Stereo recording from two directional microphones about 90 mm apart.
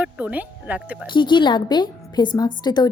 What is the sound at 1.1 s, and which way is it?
A woman's voice, 60° left (ahead or behind).